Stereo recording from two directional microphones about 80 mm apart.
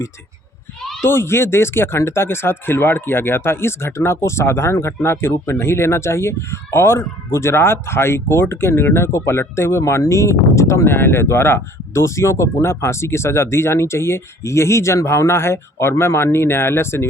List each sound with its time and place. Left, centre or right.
1.0 s speech: left